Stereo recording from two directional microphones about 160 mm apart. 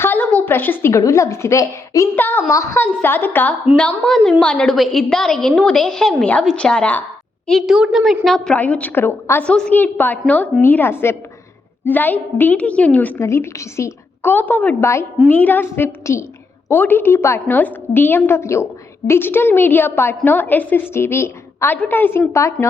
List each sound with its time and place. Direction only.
0.0 s a woman's voice: 10° left (ahead or behind)